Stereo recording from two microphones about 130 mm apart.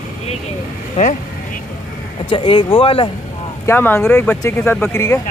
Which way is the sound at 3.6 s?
15° left (ahead or behind).